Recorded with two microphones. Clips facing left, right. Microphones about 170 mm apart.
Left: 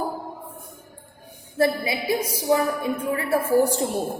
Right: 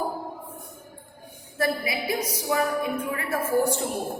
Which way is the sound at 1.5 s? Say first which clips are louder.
Left 4 dB; 25° left (ahead or behind).